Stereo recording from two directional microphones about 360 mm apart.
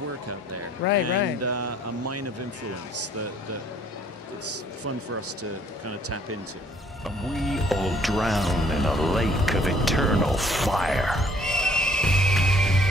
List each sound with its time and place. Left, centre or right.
1.4 s speech: right
5.4 s speech: right
7.3 s speech: centre